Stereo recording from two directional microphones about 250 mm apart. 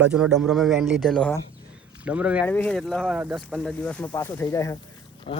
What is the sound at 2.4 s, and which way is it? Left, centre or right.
Speech, centre.